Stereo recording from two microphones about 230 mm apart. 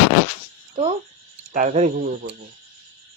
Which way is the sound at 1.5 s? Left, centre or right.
Right.